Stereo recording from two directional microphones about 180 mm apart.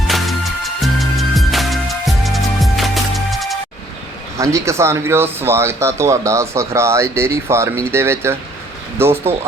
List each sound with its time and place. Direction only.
0.8 s music: centre (ahead or behind)
4.4 s speech: 15° right (ahead or behind)